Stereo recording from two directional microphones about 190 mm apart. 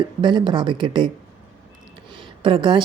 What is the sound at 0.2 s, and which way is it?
Speech, 25° right (ahead or behind).